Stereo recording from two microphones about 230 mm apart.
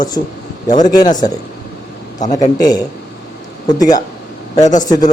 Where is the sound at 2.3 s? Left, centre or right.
Centre.